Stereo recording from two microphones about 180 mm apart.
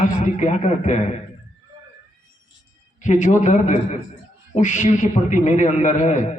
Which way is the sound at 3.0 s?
45° left (ahead or behind).